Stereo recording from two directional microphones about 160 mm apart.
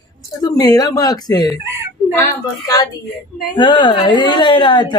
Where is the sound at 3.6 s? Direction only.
30° left (ahead or behind).